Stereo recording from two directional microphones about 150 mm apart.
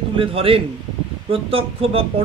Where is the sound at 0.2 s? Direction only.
40° right (ahead or behind).